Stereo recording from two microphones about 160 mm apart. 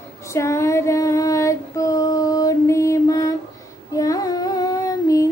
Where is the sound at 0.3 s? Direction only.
20° left (ahead or behind).